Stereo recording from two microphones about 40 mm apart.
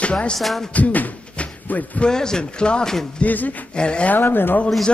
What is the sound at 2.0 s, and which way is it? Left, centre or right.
Speech, centre.